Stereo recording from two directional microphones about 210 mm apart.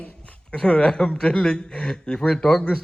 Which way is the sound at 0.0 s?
5° left (ahead or behind).